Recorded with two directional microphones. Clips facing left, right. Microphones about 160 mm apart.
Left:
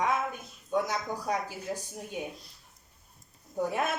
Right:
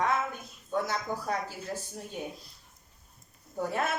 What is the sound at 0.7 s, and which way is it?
A woman's voice, 15° left (ahead or behind).